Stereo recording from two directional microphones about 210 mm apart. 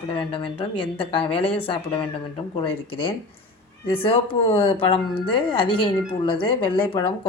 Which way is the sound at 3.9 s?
25° left (ahead or behind).